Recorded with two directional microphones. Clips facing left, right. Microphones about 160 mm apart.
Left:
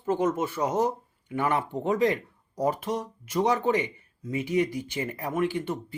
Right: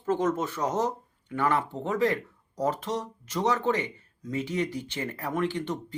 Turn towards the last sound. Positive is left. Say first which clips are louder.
# left 1 dB
turn(degrees=10)  # may be behind; listen again after turning